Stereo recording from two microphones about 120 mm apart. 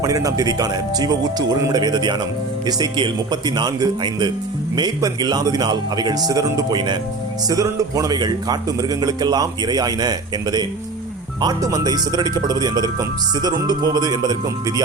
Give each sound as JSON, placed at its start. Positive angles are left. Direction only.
{"t": 0.0, "sound": "a man's voice", "side_deg": -30}